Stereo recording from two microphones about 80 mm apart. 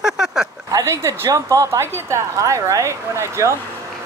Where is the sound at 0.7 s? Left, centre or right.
Right.